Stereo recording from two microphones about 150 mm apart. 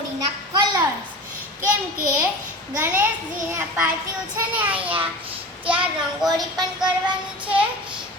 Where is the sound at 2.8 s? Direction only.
15° right (ahead or behind).